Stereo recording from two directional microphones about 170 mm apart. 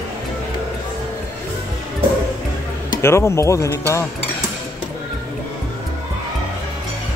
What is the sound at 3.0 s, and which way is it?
Cutlery, 15° left (ahead or behind).